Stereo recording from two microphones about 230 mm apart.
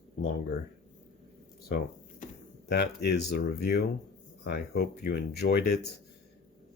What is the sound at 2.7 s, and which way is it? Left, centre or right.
Speech, left.